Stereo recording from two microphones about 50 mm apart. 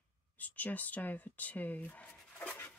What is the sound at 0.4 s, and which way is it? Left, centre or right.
Speech, left.